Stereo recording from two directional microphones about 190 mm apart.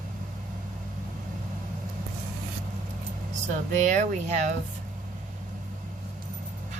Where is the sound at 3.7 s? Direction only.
40° right (ahead or behind).